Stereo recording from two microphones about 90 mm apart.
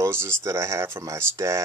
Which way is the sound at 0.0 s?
25° right (ahead or behind).